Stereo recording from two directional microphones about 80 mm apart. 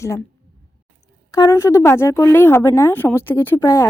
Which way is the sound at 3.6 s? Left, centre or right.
Left.